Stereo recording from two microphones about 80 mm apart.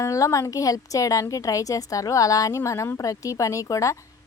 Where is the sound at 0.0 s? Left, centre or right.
Left.